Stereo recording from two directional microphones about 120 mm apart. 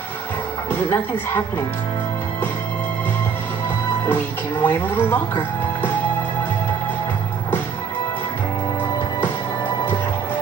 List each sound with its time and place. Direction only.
0.7 s speech: 15° left (ahead or behind)
4.0 s speech: 15° left (ahead or behind)